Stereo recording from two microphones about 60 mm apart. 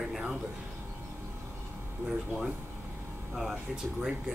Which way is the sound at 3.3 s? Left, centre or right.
Centre.